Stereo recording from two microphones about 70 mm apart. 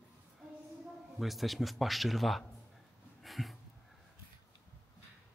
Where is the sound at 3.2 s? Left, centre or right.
Centre.